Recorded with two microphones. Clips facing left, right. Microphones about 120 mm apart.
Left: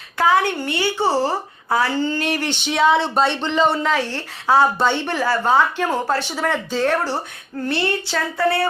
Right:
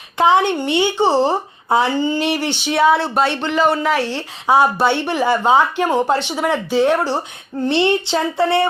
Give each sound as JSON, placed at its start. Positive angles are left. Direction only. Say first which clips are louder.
{"t": 0.2, "sound": "a woman's voice", "louder": "right 3 dB", "side_deg": -25}